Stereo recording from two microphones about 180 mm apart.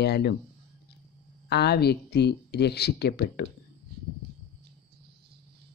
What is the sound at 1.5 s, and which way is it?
Speech, 65° left (ahead or behind).